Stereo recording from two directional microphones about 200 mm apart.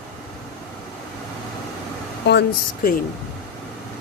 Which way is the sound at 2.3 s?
50° left (ahead or behind).